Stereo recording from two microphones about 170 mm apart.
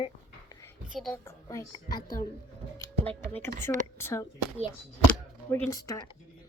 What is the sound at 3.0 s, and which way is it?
Speech, 10° left (ahead or behind).